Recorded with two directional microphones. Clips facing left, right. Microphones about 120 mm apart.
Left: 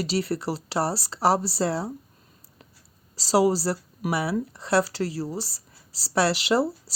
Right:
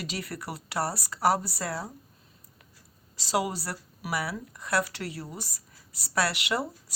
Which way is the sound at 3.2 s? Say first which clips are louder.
Left 8 dB; 35° left (ahead or behind).